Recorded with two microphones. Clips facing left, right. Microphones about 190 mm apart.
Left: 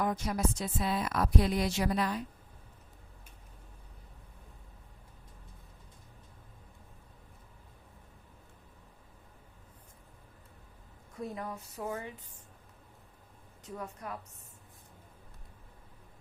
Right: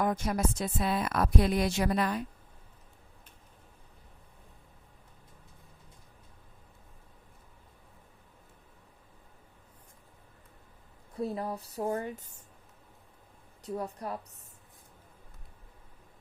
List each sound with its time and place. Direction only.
0.0 s a woman's voice: 55° right (ahead or behind)
11.1 s speech: 35° right (ahead or behind)
13.7 s speech: 35° right (ahead or behind)